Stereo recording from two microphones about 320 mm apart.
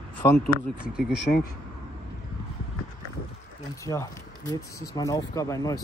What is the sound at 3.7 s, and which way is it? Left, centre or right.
Speech, centre.